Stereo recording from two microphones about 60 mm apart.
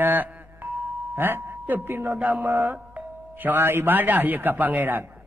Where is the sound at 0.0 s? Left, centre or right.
Right.